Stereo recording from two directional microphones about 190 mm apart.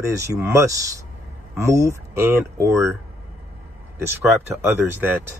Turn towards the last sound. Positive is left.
turn(degrees=-10)  # may be behind; listen again after turning